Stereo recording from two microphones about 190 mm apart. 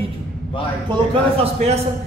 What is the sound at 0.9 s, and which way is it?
Speech, 35° right (ahead or behind).